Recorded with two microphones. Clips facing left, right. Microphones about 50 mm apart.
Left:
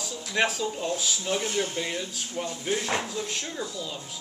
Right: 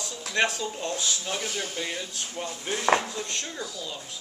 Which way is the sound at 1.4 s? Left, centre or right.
Left.